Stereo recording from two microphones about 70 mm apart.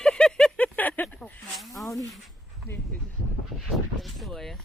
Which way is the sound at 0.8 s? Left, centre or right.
Left.